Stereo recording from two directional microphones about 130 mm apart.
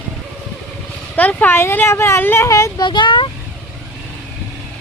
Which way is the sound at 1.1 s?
10° left (ahead or behind).